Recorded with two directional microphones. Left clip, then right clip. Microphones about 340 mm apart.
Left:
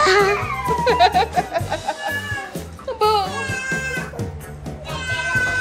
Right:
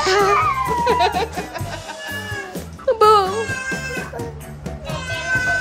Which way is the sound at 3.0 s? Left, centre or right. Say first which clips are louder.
Right 5 dB; right.